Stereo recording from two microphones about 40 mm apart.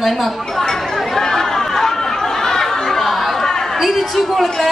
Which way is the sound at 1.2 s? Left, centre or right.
Centre.